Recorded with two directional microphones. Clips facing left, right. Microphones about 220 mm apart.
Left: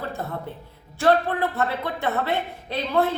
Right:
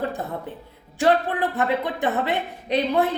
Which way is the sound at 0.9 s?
15° right (ahead or behind).